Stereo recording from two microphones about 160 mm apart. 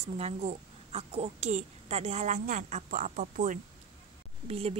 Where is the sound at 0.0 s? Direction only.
40° right (ahead or behind); by 3.5 s 55° right (ahead or behind).